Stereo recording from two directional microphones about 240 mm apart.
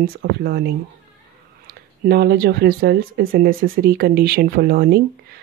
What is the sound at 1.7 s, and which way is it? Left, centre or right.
A woman's voice, right.